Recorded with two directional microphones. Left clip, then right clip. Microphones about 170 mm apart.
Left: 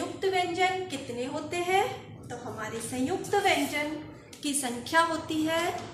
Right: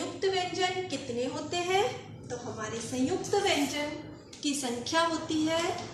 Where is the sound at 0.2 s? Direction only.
30° left (ahead or behind).